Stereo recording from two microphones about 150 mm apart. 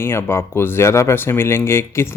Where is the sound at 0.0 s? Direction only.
15° left (ahead or behind).